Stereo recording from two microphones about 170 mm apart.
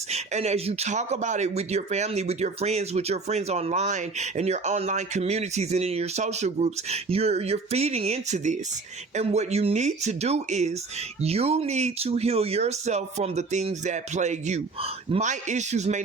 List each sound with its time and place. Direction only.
0.1 s speech: 40° right (ahead or behind)